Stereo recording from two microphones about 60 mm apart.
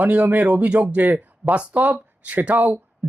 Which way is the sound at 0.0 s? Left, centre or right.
Right.